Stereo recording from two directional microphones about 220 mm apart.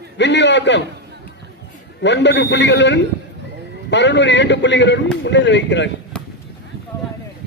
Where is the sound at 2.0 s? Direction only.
55° left (ahead or behind).